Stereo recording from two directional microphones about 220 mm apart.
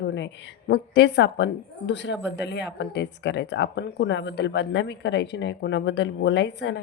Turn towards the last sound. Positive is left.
turn(degrees=50)  # may be behind; listen again after turning